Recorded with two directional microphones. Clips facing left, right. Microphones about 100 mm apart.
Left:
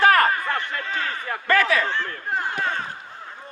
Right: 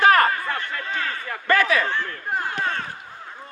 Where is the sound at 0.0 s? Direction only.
20° right (ahead or behind).